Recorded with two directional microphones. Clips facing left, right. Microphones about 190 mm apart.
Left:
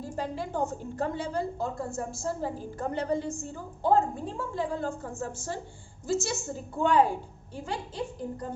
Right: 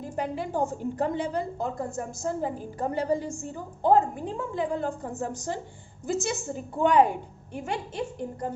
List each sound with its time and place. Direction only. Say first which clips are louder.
0.0 s a woman's voice: right 2 dB; 15° right (ahead or behind)